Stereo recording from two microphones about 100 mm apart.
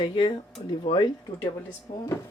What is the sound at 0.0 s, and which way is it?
Speech, 55° left (ahead or behind).